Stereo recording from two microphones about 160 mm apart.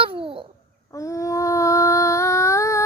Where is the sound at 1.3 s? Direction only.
20° left (ahead or behind).